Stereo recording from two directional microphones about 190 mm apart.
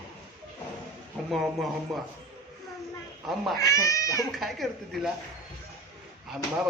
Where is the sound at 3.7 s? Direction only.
15° left (ahead or behind).